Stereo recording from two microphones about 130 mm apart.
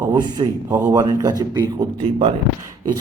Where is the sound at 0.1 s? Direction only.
30° right (ahead or behind).